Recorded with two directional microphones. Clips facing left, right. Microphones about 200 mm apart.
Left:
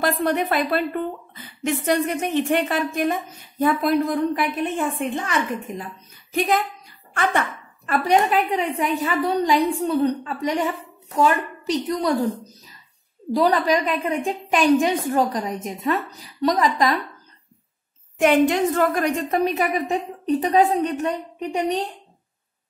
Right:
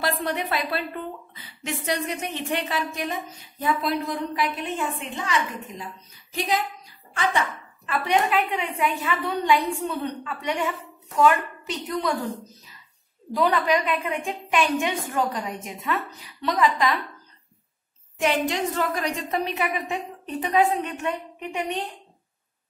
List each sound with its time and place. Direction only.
0.0 s a woman's voice: 50° left (ahead or behind)
13.3 s a woman's voice: 35° left (ahead or behind)
18.1 s a woman's voice: 55° left (ahead or behind); by 21.8 s 35° left (ahead or behind)